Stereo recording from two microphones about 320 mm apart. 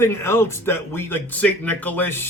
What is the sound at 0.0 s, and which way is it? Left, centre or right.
A man's voice, centre.